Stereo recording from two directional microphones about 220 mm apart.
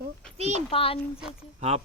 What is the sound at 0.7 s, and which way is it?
Speech, 25° left (ahead or behind).